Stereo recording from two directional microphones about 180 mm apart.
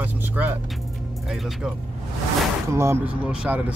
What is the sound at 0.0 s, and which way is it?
Music, 10° right (ahead or behind).